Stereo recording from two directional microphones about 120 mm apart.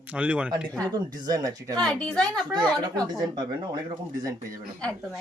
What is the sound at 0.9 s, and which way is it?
Speech, 35° right (ahead or behind).